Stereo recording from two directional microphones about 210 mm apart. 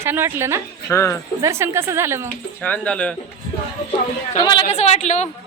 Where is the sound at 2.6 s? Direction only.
5° left (ahead or behind).